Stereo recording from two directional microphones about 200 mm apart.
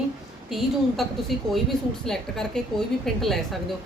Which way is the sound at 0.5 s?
Centre (ahead or behind).